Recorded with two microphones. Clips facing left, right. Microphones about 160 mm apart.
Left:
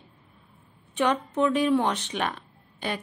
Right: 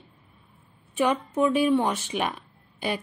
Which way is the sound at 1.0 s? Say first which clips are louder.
Right 1 dB; 5° right (ahead or behind).